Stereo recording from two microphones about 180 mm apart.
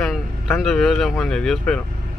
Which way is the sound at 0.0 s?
Centre (ahead or behind).